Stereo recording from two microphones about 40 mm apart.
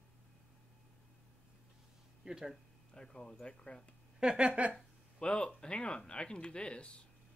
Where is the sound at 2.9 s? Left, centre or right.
Centre.